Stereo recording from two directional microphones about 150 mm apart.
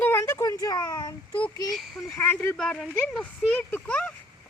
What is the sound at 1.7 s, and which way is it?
Speech, centre (ahead or behind).